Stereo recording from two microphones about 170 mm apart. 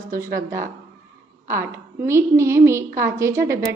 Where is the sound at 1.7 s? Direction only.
15° right (ahead or behind).